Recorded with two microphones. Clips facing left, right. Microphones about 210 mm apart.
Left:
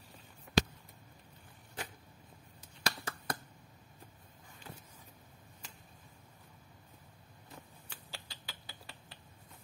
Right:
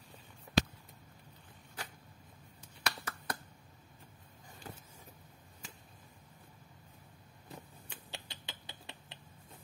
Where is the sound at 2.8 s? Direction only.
25° left (ahead or behind).